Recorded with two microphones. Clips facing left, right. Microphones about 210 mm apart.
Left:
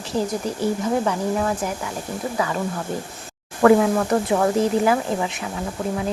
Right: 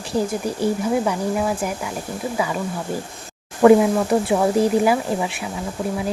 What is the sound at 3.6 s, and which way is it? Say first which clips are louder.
Speech: right 2 dB; 15° right (ahead or behind).